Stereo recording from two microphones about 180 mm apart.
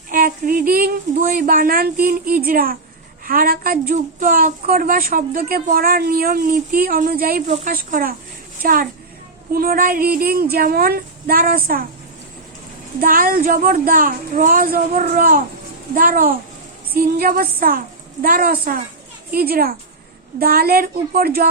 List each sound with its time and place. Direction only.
0.1 s a sound: 50° right (ahead or behind)
3.2 s a woman's voice: 50° right (ahead or behind)
7.4 s a woman's voice: 40° right (ahead or behind)
13.0 s a woman's voice: 50° right (ahead or behind)